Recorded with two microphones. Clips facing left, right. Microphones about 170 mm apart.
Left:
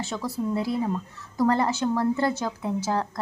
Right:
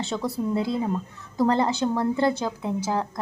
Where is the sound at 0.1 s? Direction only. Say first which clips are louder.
Right 2 dB; 25° right (ahead or behind).